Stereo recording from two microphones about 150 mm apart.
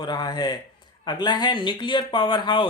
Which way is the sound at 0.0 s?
30° left (ahead or behind).